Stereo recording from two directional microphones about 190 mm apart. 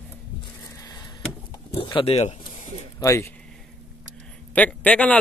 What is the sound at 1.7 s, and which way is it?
Speech, 30° left (ahead or behind).